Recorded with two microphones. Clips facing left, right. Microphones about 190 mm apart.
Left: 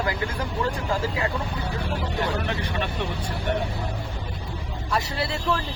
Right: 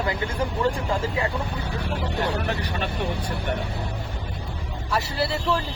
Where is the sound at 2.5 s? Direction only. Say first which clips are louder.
Right 1 dB; 40° right (ahead or behind).